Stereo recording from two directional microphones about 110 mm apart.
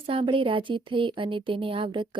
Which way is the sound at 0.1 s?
55° right (ahead or behind).